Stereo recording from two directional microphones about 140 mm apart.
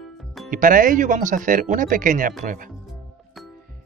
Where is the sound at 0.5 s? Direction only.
75° right (ahead or behind).